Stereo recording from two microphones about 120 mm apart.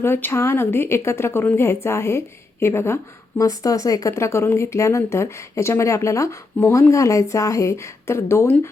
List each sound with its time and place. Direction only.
0.0 s a woman's voice: 20° left (ahead or behind)